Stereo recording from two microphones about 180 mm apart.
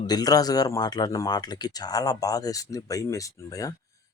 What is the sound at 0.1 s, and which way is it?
Speech, 20° left (ahead or behind).